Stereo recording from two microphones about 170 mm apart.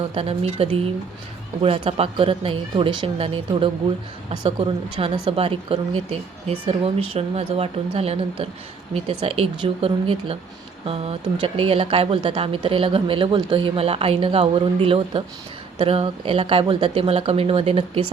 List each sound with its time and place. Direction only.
0.1 s speech: 35° right (ahead or behind)